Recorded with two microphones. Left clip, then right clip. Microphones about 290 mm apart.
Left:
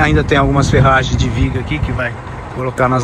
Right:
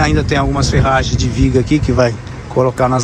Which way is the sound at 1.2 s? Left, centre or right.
Centre.